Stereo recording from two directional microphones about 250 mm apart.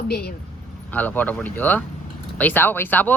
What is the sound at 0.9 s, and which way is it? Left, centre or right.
Speech, centre.